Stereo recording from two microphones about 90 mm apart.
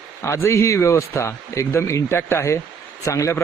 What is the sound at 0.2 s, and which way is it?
A man's voice, 30° left (ahead or behind).